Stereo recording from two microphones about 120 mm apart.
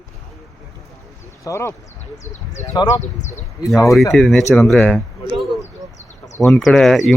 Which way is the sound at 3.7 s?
Centre (ahead or behind).